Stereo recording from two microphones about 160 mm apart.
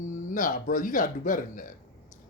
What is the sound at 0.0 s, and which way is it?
Speech, 55° left (ahead or behind).